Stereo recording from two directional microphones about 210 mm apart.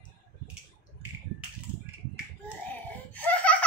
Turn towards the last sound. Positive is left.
turn(degrees=5)  # may be behind; listen again after turning